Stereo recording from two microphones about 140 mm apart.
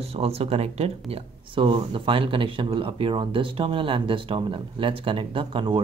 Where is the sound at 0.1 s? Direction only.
45° right (ahead or behind).